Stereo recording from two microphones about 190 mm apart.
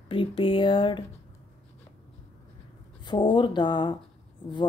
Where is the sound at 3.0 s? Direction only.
25° left (ahead or behind).